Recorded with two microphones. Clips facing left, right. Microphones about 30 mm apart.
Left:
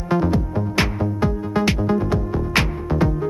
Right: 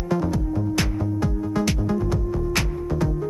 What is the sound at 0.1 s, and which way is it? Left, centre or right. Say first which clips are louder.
Music: left 4 dB; left.